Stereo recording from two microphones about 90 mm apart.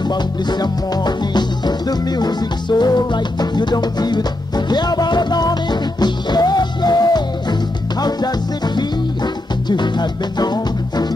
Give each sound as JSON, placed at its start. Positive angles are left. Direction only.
{"t": 0.1, "sound": "music", "side_deg": 50}